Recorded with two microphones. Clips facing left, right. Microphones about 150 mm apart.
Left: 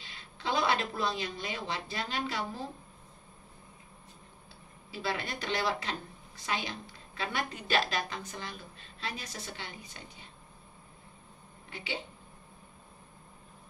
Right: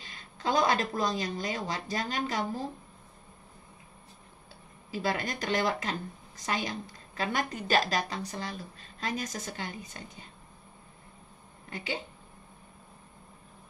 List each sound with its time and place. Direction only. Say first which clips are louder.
0.0 s a woman's voice: right 4 dB; 45° right (ahead or behind)
4.9 s a woman's voice: right 4 dB; 45° right (ahead or behind)
11.7 s a woman's voice: right 3 dB; 45° right (ahead or behind)